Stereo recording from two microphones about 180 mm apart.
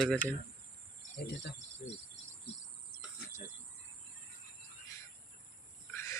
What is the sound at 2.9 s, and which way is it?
Cricket, 50° left (ahead or behind).